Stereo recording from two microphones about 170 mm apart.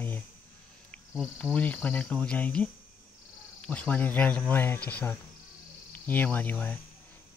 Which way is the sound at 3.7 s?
10° left (ahead or behind).